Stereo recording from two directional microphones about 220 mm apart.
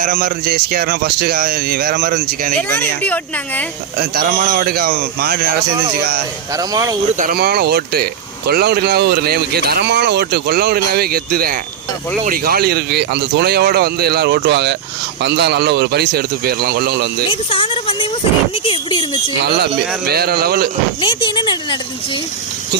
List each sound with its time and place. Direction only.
0.0 s speech: 40° right (ahead or behind)
2.7 s speech: 5° left (ahead or behind)
4.0 s speech: 45° right (ahead or behind)
6.5 s speech: 15° right (ahead or behind)
7.2 s speech: 40° right (ahead or behind)
17.5 s speech: 25° left (ahead or behind)
19.4 s speech: 45° right (ahead or behind)
21.0 s speech: 20° left (ahead or behind)